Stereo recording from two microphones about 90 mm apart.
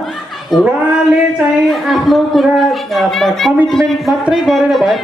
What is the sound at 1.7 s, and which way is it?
Speech, centre (ahead or behind).